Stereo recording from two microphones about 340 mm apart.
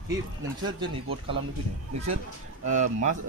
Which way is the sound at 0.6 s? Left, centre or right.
Centre.